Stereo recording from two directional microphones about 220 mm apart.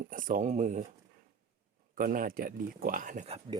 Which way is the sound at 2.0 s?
40° right (ahead or behind).